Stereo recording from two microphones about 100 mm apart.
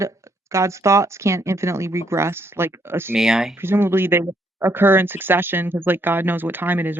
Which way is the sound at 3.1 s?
5° right (ahead or behind).